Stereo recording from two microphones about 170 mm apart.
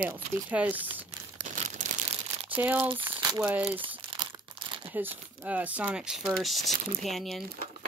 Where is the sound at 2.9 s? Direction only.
30° right (ahead or behind).